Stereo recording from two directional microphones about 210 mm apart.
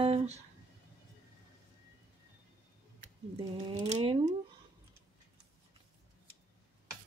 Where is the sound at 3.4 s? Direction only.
25° right (ahead or behind).